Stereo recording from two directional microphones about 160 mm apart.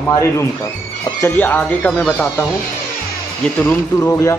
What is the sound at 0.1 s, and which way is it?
Speech, 20° left (ahead or behind).